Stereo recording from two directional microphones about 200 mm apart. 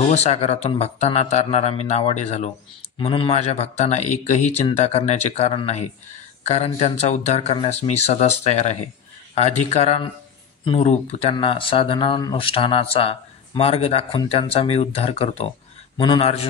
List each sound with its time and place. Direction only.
0.0 s speech: 35° left (ahead or behind)